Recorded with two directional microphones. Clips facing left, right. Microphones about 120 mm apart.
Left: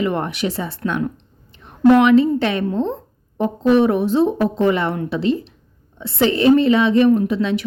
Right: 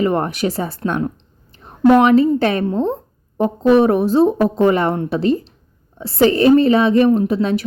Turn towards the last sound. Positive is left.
turn(degrees=-40)  # may be behind; listen again after turning